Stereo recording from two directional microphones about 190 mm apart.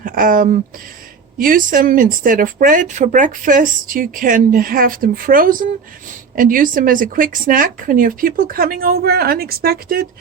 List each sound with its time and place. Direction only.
0.0 s speech: 45° right (ahead or behind)